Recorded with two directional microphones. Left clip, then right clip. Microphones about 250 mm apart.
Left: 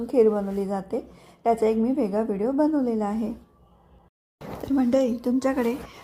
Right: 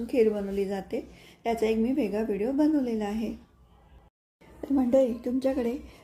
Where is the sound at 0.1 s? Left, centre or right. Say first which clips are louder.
Left 4 dB; centre.